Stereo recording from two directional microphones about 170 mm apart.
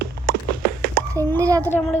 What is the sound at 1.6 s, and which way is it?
Speech, 5° left (ahead or behind).